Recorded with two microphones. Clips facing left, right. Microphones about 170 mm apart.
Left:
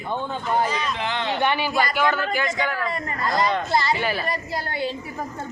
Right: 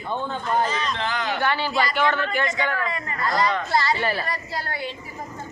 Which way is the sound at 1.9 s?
5° left (ahead or behind).